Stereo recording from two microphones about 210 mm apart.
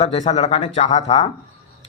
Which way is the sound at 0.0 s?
30° left (ahead or behind).